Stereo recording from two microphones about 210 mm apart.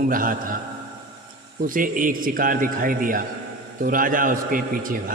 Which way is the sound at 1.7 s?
40° right (ahead or behind).